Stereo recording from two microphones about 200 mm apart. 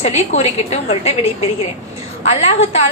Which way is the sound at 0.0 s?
35° left (ahead or behind).